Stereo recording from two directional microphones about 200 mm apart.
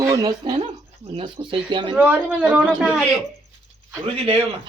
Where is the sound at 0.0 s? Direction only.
20° right (ahead or behind).